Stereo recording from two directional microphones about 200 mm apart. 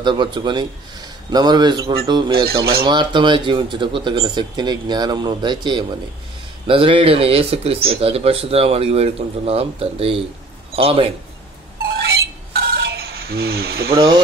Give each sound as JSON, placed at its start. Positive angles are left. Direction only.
{"t": 0.0, "sound": "speech", "side_deg": -25}
{"t": 12.0, "sound": "stir", "side_deg": -55}
{"t": 13.8, "sound": "speech", "side_deg": -20}